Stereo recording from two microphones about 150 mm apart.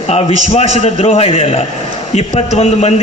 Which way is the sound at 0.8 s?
50° left (ahead or behind).